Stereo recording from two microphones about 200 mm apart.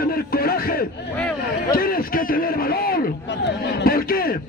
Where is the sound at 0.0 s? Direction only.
50° left (ahead or behind).